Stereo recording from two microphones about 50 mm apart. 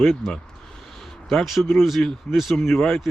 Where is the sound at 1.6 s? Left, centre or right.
Centre.